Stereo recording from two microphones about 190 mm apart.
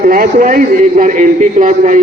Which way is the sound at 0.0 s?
45° right (ahead or behind).